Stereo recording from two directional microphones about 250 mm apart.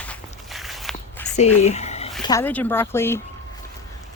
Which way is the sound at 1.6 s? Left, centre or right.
Left.